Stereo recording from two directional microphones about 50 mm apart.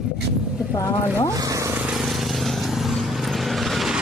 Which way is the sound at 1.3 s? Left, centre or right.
Right.